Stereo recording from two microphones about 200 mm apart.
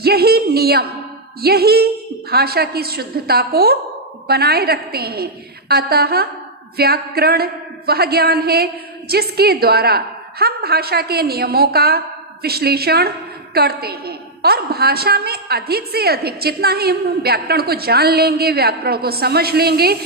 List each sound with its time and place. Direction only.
0.0 s a woman's voice: 50° right (ahead or behind)